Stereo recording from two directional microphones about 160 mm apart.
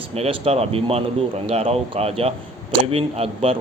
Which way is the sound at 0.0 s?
35° right (ahead or behind).